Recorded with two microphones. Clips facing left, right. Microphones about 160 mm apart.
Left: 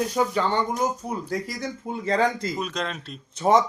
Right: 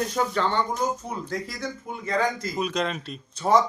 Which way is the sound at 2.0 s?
30° left (ahead or behind).